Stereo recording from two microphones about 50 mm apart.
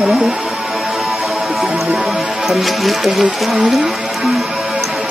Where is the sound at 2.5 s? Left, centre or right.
Centre.